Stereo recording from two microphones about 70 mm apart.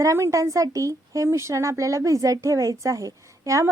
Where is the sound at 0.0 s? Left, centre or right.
Right.